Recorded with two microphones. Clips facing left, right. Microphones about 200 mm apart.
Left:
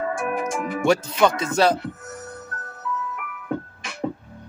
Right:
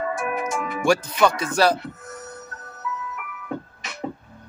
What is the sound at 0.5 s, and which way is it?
Music, 50° left (ahead or behind).